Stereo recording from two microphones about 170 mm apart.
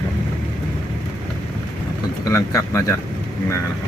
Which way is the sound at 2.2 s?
20° left (ahead or behind).